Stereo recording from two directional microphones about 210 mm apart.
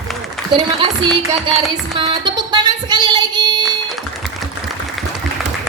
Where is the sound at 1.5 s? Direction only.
Centre (ahead or behind).